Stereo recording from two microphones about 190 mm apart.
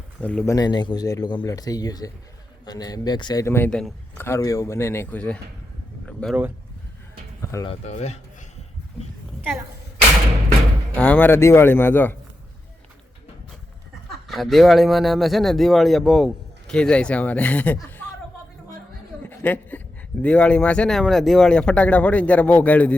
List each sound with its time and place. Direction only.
0.2 s speech: 5° left (ahead or behind)
0.5 s a man's voice: 20° left (ahead or behind); by 4.3 s 5° left (ahead or behind)
4.3 s speech: 15° left (ahead or behind)
6.1 s a sound: 5° left (ahead or behind)
7.4 s speech: 15° left (ahead or behind)
7.7 s speech: 35° left (ahead or behind)
10.9 s speech: 5° left (ahead or behind)
14.3 s a man's voice: centre (ahead or behind)
19.4 s a sound: 10° left (ahead or behind)
20.2 s speech: 5° left (ahead or behind)